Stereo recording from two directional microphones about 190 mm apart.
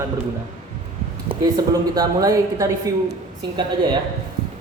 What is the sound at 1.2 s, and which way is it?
Speech, 20° right (ahead or behind).